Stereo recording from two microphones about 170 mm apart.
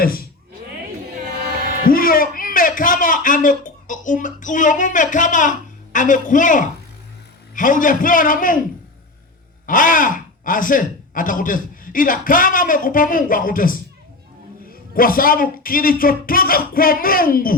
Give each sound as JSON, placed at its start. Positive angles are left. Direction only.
{"t": 0.0, "sound": "speech", "side_deg": 60}
{"t": 1.8, "sound": "a man's voice", "side_deg": 55}
{"t": 9.6, "sound": "a man's voice", "side_deg": 50}